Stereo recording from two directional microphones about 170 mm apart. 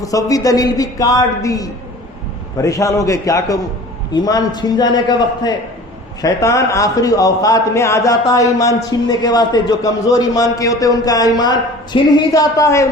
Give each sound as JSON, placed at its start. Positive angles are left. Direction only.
{"t": 0.0, "sound": "a man's voice", "side_deg": 20}